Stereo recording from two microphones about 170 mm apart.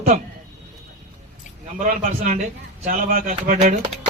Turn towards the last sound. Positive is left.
turn(degrees=-55)  # may be behind; listen again after turning